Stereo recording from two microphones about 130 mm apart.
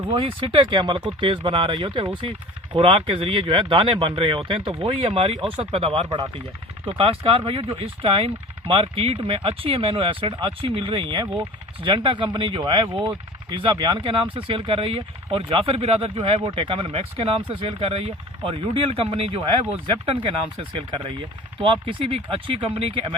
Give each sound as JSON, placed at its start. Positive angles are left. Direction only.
{"t": 0.2, "sound": "speech", "side_deg": -40}
{"t": 6.1, "sound": "speech", "side_deg": -35}